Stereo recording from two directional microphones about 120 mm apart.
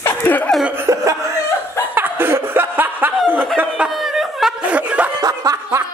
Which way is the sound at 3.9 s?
Centre (ahead or behind).